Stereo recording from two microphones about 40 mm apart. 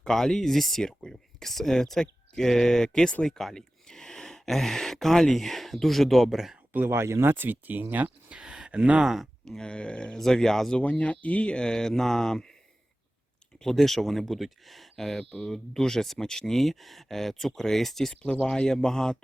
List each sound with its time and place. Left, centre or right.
0.0 s speech: centre
6.8 s speech: right
8.3 s a sound: right
9.0 s speech: centre
9.6 s speech: left
10.2 s speech: centre
10.8 s speech: left; by 12.5 s centre
13.6 s speech: centre
18.1 s speech: left